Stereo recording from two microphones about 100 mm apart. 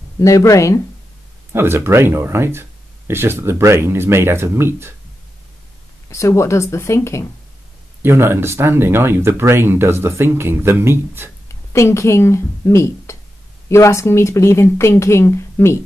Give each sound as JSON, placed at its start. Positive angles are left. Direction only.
{"t": 0.2, "sound": "speech", "side_deg": 30}
{"t": 1.5, "sound": "speech", "side_deg": -25}
{"t": 6.0, "sound": "speech", "side_deg": 30}
{"t": 8.0, "sound": "speech", "side_deg": -25}
{"t": 11.4, "sound": "speech", "side_deg": 30}